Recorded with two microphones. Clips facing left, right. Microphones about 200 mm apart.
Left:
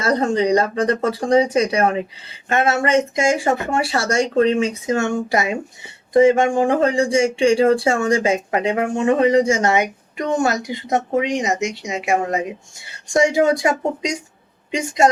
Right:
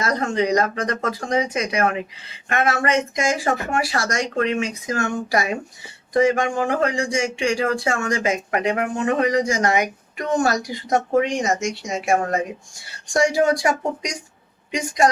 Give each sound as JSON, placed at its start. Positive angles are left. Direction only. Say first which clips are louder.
{"t": 0.0, "sound": "speech", "louder": "left 4 dB", "side_deg": 30}